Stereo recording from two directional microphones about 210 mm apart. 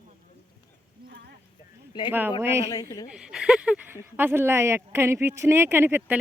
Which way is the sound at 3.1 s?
5° right (ahead or behind).